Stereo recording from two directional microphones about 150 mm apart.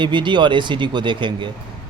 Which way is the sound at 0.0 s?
30° right (ahead or behind).